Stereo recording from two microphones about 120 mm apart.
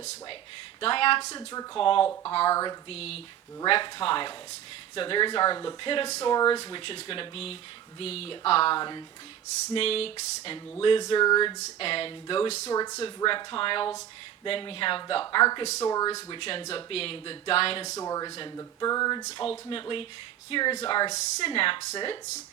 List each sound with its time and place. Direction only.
0.8 s speech: 50° left (ahead or behind)
2.5 s speech: 30° left (ahead or behind)
2.9 s speech: 60° left (ahead or behind)
3.7 s speech: 45° left (ahead or behind)
8.7 s speech: 40° left (ahead or behind)
9.7 s speech: 55° left (ahead or behind)
11.2 s speech: 35° left (ahead or behind)
11.6 s speech: 50° left (ahead or behind)
12.7 s speech: 30° left (ahead or behind)
13.2 s speech: 45° left (ahead or behind)
16.4 s speech: 50° left (ahead or behind)
17.9 s speech: 30° left (ahead or behind)
19.4 s speech: 45° left (ahead or behind)